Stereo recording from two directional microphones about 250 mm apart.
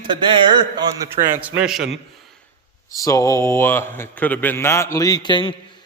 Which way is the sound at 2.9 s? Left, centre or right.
Centre.